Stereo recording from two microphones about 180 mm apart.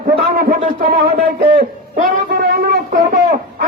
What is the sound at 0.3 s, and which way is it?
Speech, 60° right (ahead or behind).